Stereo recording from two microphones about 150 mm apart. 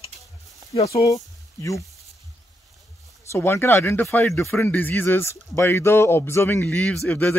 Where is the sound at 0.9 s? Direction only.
20° left (ahead or behind).